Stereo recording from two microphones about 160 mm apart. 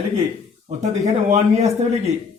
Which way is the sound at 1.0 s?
45° right (ahead or behind).